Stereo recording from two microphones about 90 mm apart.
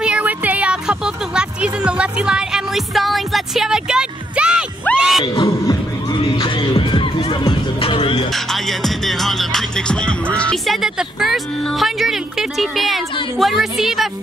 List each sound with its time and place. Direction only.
0.0 s music: 15° right (ahead or behind)
4.9 s a sound: 20° left (ahead or behind)
5.3 s music: 40° left (ahead or behind)
6.3 s music: 60° left (ahead or behind); by 8.1 s 75° left (ahead or behind)
8.3 s music: centre (ahead or behind)
10.6 s music: 5° right (ahead or behind)